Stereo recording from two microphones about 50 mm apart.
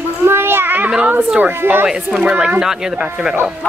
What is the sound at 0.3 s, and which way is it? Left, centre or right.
Child singing, right.